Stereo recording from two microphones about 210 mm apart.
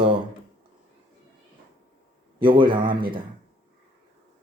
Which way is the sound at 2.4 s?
25° right (ahead or behind).